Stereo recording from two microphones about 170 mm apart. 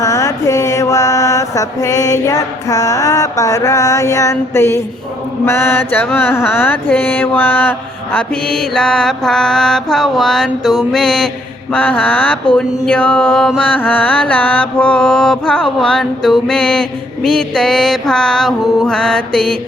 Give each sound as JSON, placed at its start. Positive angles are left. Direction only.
{"t": 0.0, "sound": "mantra", "side_deg": 20}